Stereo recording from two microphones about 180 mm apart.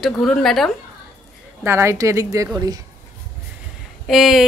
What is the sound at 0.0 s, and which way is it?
Speech, centre (ahead or behind).